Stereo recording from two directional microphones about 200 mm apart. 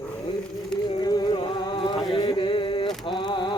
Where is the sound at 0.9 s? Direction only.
20° left (ahead or behind).